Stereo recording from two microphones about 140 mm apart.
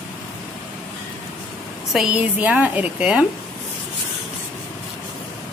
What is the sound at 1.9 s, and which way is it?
A woman's voice, 10° right (ahead or behind).